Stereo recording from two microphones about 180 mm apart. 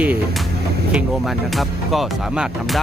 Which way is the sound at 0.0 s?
5° right (ahead or behind).